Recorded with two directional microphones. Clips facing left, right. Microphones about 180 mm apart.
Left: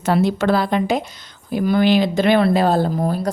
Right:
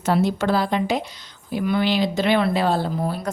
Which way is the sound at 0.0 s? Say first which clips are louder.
Left 3 dB; 70° left (ahead or behind).